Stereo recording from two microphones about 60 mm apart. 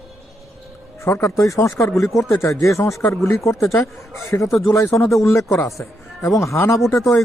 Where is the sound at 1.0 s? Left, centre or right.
Left.